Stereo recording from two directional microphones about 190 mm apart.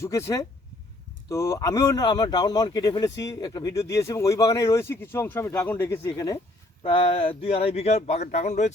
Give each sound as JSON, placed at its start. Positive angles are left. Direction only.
{"t": 0.0, "sound": "speech", "side_deg": 15}